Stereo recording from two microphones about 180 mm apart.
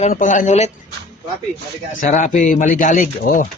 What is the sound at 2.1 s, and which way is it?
Speech, 45° left (ahead or behind).